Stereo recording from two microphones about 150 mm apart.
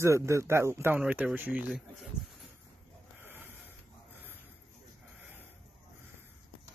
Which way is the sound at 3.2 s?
15° right (ahead or behind).